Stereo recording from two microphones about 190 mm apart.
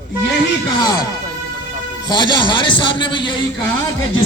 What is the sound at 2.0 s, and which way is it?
A man's voice, 25° left (ahead or behind).